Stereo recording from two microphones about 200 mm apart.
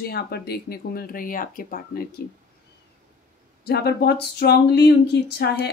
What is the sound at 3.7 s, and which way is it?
Speech, 55° left (ahead or behind).